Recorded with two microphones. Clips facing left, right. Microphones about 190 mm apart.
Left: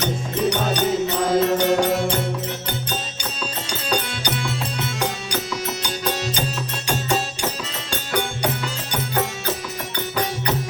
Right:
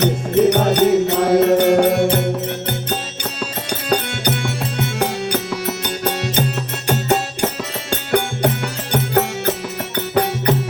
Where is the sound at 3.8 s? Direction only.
55° right (ahead or behind).